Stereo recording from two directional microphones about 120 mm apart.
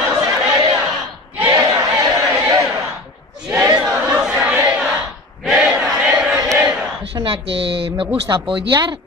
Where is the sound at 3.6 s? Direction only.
30° right (ahead or behind).